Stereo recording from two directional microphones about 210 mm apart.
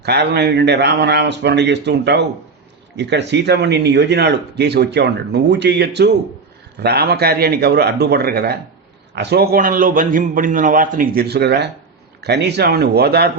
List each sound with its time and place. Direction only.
0.0 s a man's voice: 50° right (ahead or behind)